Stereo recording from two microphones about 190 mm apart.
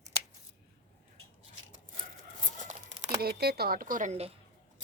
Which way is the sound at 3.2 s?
55° right (ahead or behind).